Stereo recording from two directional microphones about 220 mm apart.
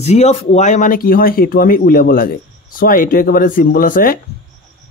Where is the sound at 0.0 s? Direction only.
30° left (ahead or behind).